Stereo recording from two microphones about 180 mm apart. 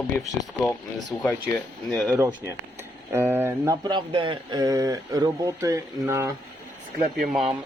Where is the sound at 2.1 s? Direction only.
15° right (ahead or behind).